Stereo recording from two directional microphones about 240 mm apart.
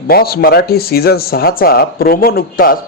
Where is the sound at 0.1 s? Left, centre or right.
Left.